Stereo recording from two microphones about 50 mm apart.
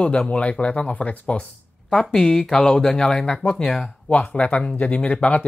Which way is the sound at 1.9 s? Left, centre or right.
Centre.